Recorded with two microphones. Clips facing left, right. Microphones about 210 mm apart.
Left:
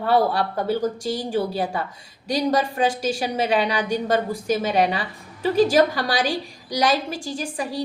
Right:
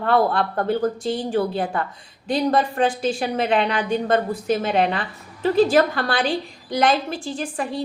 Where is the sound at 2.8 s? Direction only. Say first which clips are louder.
Right 1 dB; 10° left (ahead or behind).